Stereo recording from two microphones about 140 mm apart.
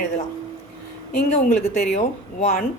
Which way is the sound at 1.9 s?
55° left (ahead or behind).